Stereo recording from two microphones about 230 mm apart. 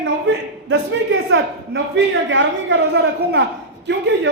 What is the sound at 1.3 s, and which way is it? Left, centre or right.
A woman's voice, right.